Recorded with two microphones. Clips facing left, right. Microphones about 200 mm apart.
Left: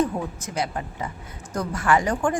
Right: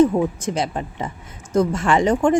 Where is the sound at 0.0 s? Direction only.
25° right (ahead or behind).